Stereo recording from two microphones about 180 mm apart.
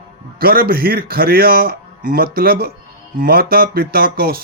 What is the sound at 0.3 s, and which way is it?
Speech, 55° right (ahead or behind).